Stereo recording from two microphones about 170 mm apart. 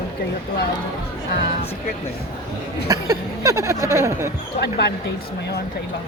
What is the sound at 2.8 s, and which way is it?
A man's voice, 20° right (ahead or behind).